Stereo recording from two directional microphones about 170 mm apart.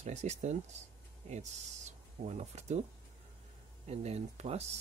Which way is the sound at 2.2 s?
40° right (ahead or behind).